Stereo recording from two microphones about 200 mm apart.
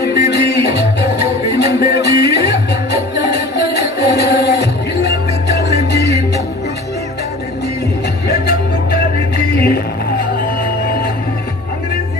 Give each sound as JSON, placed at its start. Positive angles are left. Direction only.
{"t": 0.0, "sound": "music", "side_deg": 55}